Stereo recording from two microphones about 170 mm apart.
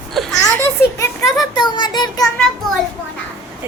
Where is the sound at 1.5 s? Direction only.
25° left (ahead or behind).